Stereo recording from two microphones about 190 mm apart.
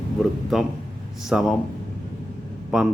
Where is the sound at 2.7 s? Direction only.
Centre (ahead or behind).